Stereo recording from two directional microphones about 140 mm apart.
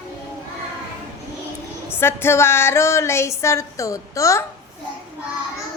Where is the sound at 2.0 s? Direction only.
15° left (ahead or behind).